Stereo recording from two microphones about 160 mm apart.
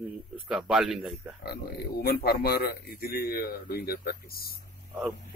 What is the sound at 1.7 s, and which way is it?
Speech, 70° left (ahead or behind).